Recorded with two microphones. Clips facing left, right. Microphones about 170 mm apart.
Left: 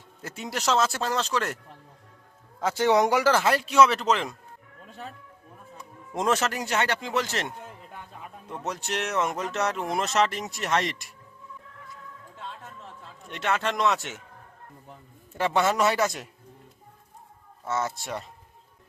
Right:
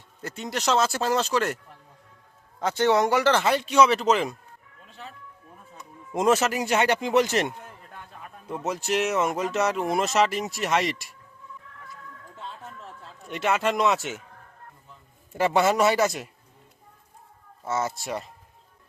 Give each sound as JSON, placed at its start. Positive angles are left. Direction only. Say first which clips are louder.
{"t": 0.2, "sound": "speech", "louder": "right 2 dB", "side_deg": 5}
{"t": 2.6, "sound": "speech", "louder": "even", "side_deg": 5}
{"t": 4.8, "sound": "music", "louder": "left 3 dB", "side_deg": 45}
{"t": 6.1, "sound": "speech", "louder": "right 4 dB", "side_deg": -5}
{"t": 7.9, "sound": "a sound", "louder": "left 1 dB", "side_deg": 10}
{"t": 8.4, "sound": "speech", "louder": "right 5 dB", "side_deg": -5}
{"t": 13.2, "sound": "speech", "louder": "right 3 dB", "side_deg": -5}
{"t": 15.4, "sound": "speech", "louder": "right 3 dB", "side_deg": -5}
{"t": 17.7, "sound": "speech", "louder": "right 2 dB", "side_deg": -5}